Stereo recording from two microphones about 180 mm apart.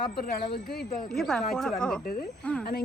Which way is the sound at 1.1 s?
5° left (ahead or behind).